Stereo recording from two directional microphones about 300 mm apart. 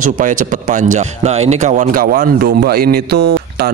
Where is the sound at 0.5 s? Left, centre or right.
Right.